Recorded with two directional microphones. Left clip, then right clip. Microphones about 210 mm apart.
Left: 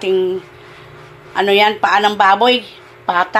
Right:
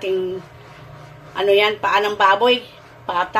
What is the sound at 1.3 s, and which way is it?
Speech, 25° left (ahead or behind).